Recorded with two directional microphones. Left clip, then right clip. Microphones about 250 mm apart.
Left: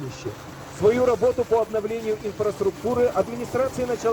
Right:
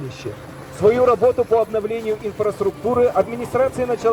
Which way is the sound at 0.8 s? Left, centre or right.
Right.